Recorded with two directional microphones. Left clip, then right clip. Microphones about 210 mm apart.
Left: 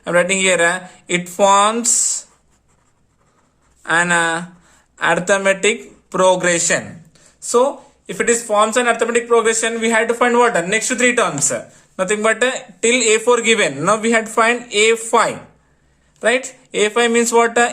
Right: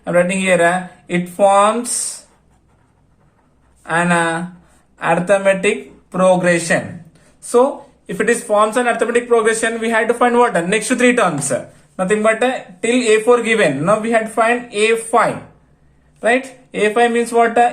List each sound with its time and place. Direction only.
0.0 s speech: 35° left (ahead or behind)
3.8 s speech: 35° left (ahead or behind)